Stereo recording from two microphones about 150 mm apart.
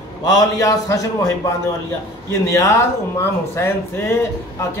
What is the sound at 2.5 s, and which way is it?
Speech, 20° left (ahead or behind).